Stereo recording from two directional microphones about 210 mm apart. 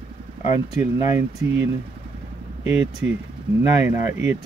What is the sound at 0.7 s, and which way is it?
Speech, 15° right (ahead or behind).